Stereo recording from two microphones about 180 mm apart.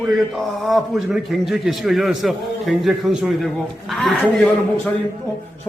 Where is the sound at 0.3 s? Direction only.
Centre (ahead or behind).